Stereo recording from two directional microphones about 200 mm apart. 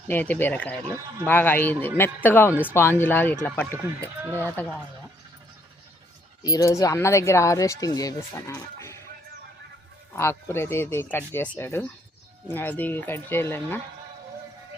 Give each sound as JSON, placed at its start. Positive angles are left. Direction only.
{"t": 0.1, "sound": "speech", "side_deg": 10}
{"t": 4.2, "sound": "speech", "side_deg": -10}
{"t": 6.4, "sound": "speech", "side_deg": 20}
{"t": 10.2, "sound": "speech", "side_deg": 10}